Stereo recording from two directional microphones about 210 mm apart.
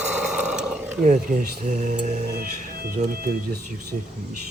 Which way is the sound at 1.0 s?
35° right (ahead or behind).